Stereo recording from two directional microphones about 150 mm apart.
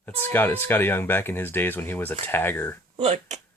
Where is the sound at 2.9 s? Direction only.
50° right (ahead or behind).